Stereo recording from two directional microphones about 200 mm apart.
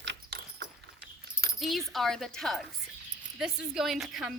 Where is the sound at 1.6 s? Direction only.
Centre (ahead or behind).